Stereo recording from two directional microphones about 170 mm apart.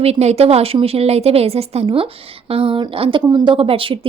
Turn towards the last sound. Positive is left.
turn(degrees=-30)  # may be behind; listen again after turning